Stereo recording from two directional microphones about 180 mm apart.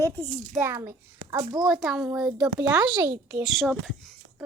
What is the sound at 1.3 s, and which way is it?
Speech, 30° right (ahead or behind).